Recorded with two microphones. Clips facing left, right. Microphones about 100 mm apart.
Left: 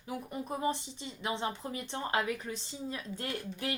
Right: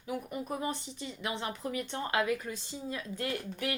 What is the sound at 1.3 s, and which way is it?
Speech, 25° left (ahead or behind).